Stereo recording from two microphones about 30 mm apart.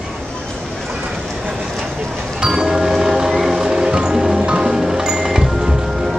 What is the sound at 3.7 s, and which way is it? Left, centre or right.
Music, right.